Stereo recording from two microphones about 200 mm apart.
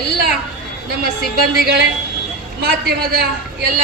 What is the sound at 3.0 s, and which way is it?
Speech, 50° right (ahead or behind).